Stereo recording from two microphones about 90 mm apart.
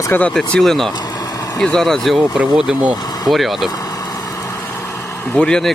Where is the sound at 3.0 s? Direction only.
45° left (ahead or behind).